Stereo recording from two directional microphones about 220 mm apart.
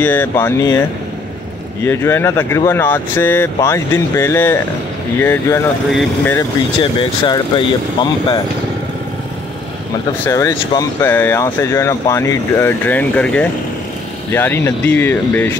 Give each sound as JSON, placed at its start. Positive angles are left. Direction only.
{"t": 0.0, "sound": "speech", "side_deg": 10}
{"t": 1.9, "sound": "speech", "side_deg": 10}
{"t": 5.9, "sound": "speech", "side_deg": 0}
{"t": 6.3, "sound": "speech", "side_deg": 20}
{"t": 10.2, "sound": "speech", "side_deg": 10}